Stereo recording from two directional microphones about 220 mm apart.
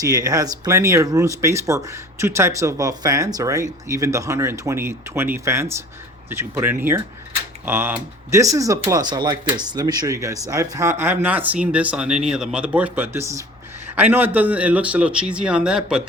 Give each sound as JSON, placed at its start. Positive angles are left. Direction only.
{"t": 0.0, "sound": "speech", "side_deg": -15}